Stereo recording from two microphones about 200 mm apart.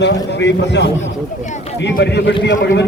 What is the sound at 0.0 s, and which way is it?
A man's voice, 60° left (ahead or behind).